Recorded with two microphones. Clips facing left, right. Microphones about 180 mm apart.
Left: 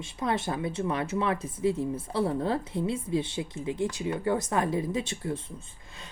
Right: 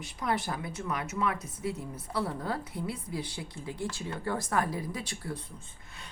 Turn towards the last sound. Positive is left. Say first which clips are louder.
# left 7 dB
turn(degrees=25)  # may be behind; listen again after turning